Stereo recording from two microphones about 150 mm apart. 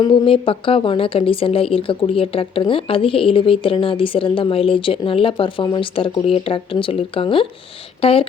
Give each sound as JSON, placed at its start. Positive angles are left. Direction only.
{"t": 0.0, "sound": "speech", "side_deg": 35}